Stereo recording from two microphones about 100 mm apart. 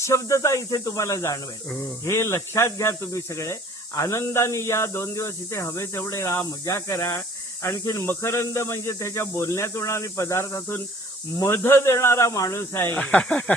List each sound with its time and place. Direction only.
0.0 s speech: 30° left (ahead or behind)
13.0 s speech: 10° left (ahead or behind)